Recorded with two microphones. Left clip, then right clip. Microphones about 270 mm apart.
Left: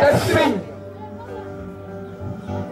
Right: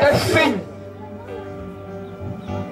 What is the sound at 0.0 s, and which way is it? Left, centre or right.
Music, centre.